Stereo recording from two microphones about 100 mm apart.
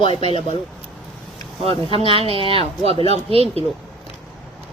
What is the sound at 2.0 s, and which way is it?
Speech, 65° right (ahead or behind).